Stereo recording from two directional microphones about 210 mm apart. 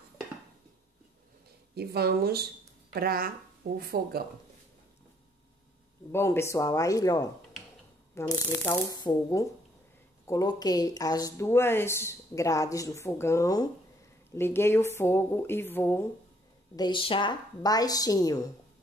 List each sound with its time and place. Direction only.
1.8 s speech: 50° right (ahead or behind)
6.1 s speech: 10° left (ahead or behind)
16.7 s speech: 20° left (ahead or behind)